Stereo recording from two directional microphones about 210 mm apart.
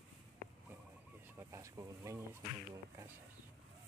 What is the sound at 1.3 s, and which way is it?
Bee, 15° right (ahead or behind).